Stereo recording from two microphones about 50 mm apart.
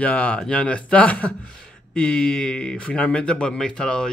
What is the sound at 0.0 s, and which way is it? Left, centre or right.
Speech, left.